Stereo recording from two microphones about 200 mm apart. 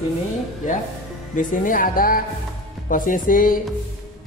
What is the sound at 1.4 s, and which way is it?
A man's voice, 40° left (ahead or behind).